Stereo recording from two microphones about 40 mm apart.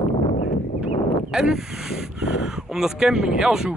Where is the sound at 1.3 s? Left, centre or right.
Centre.